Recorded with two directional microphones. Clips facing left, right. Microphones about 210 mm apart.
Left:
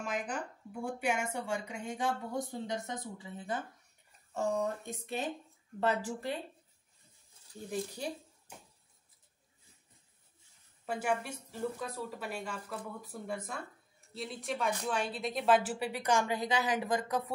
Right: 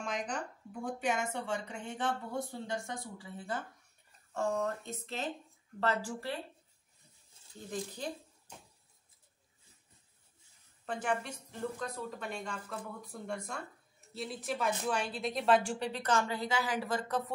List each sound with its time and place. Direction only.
0.0 s speech: 5° left (ahead or behind)
7.7 s speech: 10° left (ahead or behind)
10.9 s speech: 10° left (ahead or behind)